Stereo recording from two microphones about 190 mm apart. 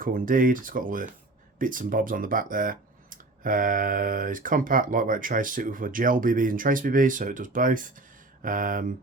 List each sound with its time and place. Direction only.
0.0 s speech: 45° right (ahead or behind)